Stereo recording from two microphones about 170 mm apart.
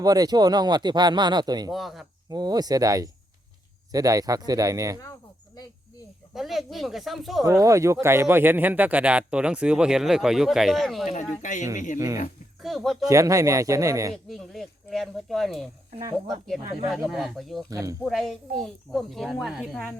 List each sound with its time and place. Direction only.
0.0 s speech: 20° right (ahead or behind)
1.7 s speech: centre (ahead or behind)
2.3 s speech: 25° right (ahead or behind)
6.3 s speech: centre (ahead or behind)
7.6 s speech: 20° right (ahead or behind); by 11.0 s centre (ahead or behind)
11.0 s speech: 45° left (ahead or behind)
11.9 s speech: 15° right (ahead or behind)
12.6 s speech: centre (ahead or behind)
13.1 s speech: 20° right (ahead or behind)
14.1 s speech: centre (ahead or behind)
17.7 s speech: 20° right (ahead or behind)
18.0 s speech: centre (ahead or behind)